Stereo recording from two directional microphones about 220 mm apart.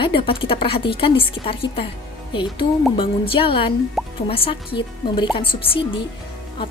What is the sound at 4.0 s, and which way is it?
Music, centre (ahead or behind).